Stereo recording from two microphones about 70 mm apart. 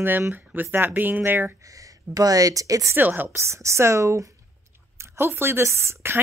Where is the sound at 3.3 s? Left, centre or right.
Right.